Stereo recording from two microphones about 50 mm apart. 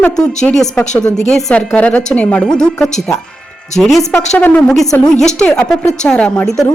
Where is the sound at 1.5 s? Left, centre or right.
Left.